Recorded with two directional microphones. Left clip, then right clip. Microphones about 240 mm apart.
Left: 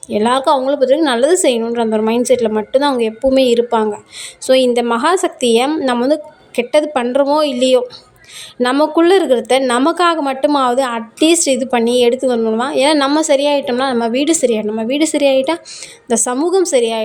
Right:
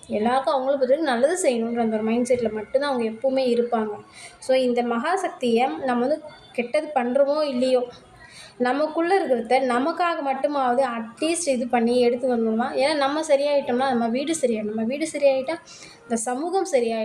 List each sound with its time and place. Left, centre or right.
0.1 s a woman's voice: left